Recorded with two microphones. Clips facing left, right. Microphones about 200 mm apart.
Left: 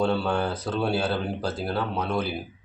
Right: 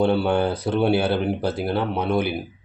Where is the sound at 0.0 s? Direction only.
20° right (ahead or behind).